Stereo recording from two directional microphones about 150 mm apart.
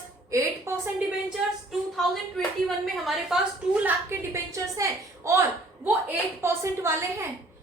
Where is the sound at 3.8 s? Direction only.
20° right (ahead or behind).